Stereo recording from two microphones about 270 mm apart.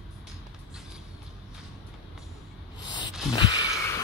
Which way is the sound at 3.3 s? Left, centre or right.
Centre.